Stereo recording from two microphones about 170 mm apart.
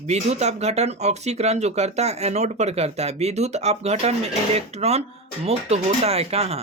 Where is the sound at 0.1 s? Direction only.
40° right (ahead or behind).